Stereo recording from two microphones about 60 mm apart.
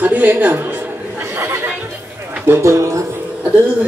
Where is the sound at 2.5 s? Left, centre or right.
Right.